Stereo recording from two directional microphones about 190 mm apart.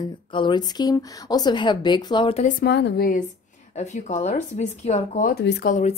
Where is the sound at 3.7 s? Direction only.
35° left (ahead or behind).